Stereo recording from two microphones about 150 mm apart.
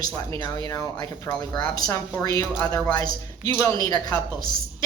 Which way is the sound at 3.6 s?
25° left (ahead or behind).